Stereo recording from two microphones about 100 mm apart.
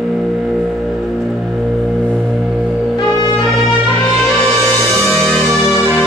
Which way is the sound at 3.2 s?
45° left (ahead or behind).